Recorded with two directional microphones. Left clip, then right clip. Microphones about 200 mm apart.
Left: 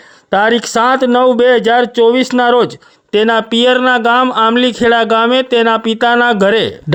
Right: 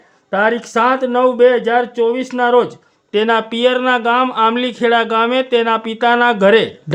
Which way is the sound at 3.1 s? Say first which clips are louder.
Left 4 dB; 35° left (ahead or behind).